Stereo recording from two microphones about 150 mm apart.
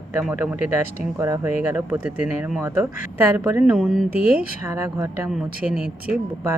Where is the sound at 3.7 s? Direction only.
Centre (ahead or behind).